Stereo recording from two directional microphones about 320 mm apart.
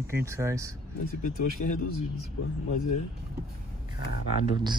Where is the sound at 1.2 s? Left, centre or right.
Left.